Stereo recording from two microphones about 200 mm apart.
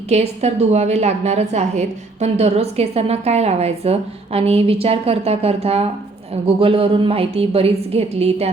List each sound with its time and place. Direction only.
0.1 s a woman's voice: 35° right (ahead or behind)